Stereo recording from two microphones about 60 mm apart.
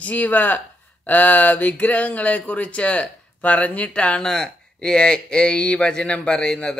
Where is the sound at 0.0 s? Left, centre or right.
Left.